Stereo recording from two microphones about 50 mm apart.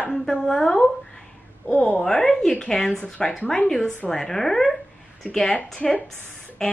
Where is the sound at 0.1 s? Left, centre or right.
Centre.